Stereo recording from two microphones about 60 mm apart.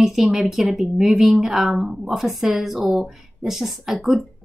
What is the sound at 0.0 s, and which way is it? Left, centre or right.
A woman's voice, centre.